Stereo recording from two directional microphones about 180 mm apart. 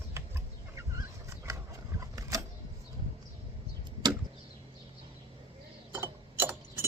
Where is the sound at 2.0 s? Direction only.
20° right (ahead or behind).